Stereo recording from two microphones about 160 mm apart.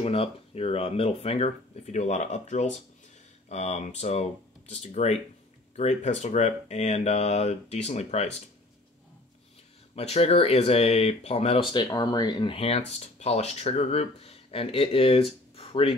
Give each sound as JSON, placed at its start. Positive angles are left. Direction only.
{"t": 0.0, "sound": "speech", "side_deg": 35}
{"t": 9.9, "sound": "speech", "side_deg": 40}